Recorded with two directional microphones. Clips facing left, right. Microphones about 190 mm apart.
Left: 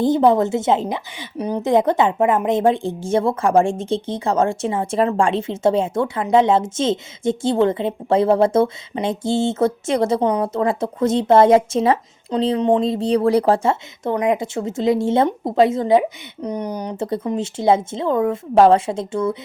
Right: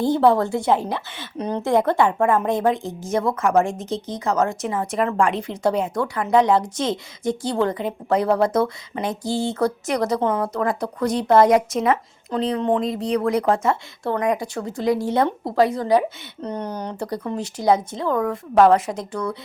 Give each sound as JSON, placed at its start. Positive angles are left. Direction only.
{"t": 0.0, "sound": "a woman's voice", "side_deg": 20}
{"t": 14.0, "sound": "a woman's voice", "side_deg": 20}
{"t": 17.0, "sound": "a woman's voice", "side_deg": 25}